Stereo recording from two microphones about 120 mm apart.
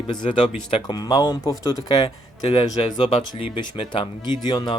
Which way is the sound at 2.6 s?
40° left (ahead or behind).